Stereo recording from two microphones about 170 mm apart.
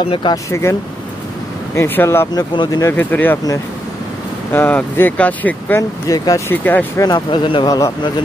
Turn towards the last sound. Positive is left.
turn(degrees=25)  # may be behind; listen again after turning